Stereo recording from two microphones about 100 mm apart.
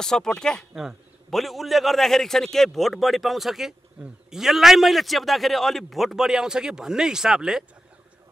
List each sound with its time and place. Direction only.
0.0 s a man's voice: 5° left (ahead or behind)